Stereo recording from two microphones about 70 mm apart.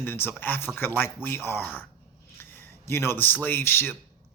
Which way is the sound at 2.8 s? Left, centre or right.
Left.